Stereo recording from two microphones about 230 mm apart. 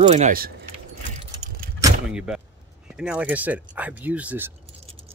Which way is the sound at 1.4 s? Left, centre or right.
Right.